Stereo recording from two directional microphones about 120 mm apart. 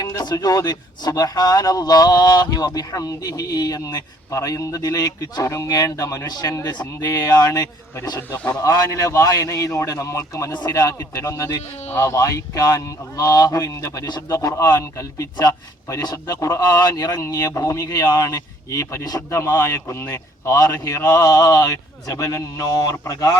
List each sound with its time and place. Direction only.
0.0 s a man's voice: 30° left (ahead or behind)